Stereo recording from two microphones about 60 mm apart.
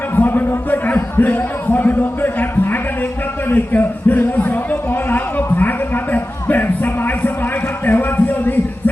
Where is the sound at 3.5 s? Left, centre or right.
Left.